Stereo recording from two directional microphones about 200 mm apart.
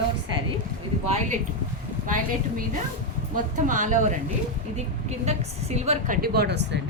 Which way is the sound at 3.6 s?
40° right (ahead or behind).